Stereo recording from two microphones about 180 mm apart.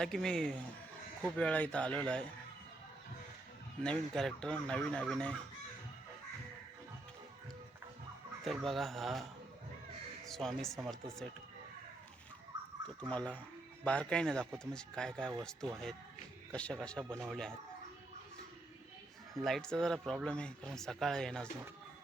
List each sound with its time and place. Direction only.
0.0 s speech: 5° left (ahead or behind)
3.8 s speech: 5° left (ahead or behind)
8.4 s speech: centre (ahead or behind)
13.0 s speech: 5° left (ahead or behind)
19.3 s speech: centre (ahead or behind)